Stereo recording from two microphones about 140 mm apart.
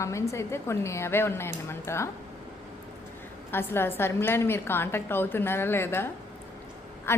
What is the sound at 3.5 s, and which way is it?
A woman's voice, 15° left (ahead or behind).